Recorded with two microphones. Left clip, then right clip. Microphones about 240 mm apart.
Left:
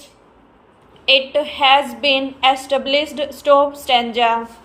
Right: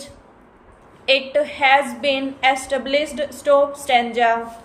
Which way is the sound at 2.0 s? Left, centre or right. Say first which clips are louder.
Left 4 dB; centre.